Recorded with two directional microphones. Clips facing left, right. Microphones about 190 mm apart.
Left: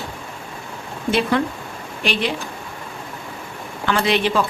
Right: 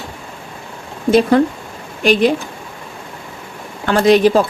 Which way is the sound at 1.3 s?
40° right (ahead or behind).